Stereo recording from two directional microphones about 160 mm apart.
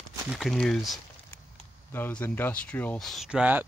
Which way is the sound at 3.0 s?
Centre (ahead or behind).